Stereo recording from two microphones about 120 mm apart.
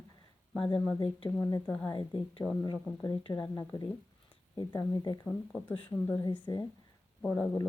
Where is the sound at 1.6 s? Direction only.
10° left (ahead or behind).